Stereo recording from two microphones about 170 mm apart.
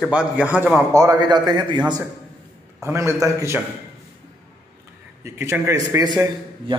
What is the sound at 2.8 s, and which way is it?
Speech, 15° right (ahead or behind).